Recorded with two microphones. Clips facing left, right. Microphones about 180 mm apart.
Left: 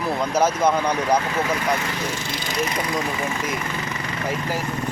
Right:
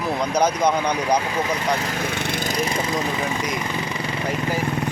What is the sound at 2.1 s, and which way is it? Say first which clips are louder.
Lawn mower: right 4 dB; 60° right (ahead or behind).